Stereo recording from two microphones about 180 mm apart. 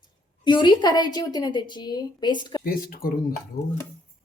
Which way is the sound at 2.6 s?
55° left (ahead or behind).